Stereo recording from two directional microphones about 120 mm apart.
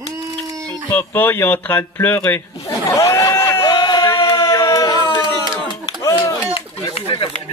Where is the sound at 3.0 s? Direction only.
25° left (ahead or behind).